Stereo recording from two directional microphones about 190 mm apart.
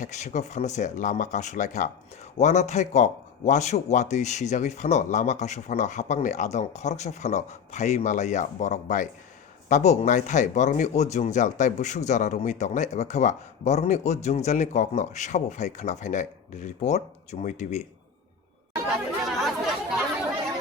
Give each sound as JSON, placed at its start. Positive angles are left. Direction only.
{"t": 0.0, "sound": "speech", "side_deg": 40}
{"t": 19.2, "sound": "chatter", "side_deg": 0}